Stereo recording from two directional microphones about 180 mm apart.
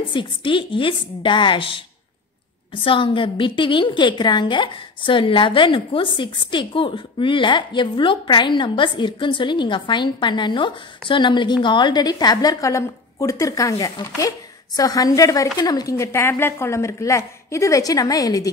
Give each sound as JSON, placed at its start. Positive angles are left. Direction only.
{"t": 0.1, "sound": "a woman's voice", "side_deg": 30}